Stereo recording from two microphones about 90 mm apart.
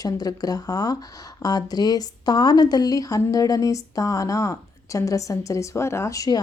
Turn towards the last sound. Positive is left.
turn(degrees=45)  # may be behind; listen again after turning